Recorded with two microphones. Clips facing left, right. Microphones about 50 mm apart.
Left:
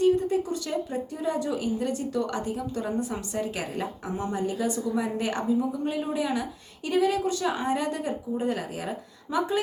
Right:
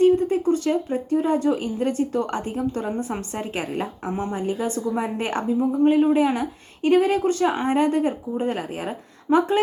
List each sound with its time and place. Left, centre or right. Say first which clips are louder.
0.0 s a woman's voice: right 5 dB; right